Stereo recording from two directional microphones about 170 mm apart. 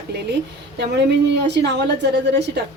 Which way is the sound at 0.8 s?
85° right.